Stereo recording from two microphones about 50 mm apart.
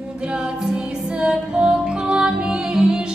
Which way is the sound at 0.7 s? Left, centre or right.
Centre.